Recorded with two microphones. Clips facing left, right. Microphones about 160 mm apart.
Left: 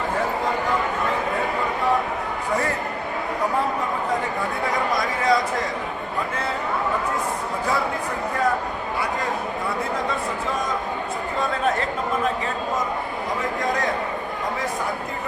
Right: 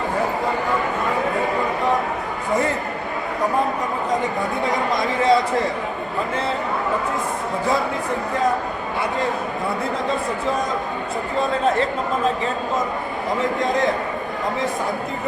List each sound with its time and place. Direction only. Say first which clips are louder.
5.2 s a man's voice: right 5 dB; 30° right (ahead or behind)